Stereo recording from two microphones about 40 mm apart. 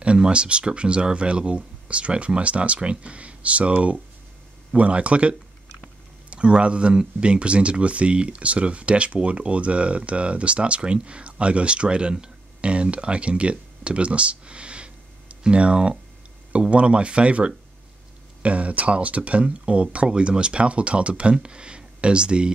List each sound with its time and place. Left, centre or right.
0.0 s speech: right
6.3 s speech: right